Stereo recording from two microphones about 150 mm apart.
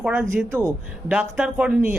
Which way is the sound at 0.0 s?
10° right (ahead or behind).